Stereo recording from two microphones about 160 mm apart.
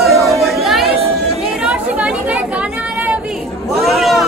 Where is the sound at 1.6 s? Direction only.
10° right (ahead or behind).